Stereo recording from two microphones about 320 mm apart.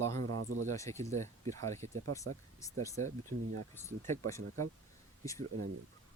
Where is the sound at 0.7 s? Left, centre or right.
Centre.